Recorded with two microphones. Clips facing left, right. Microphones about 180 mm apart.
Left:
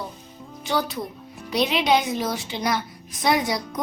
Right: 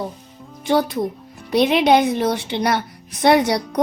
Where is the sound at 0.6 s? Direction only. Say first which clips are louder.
Right 7 dB; 55° right (ahead or behind).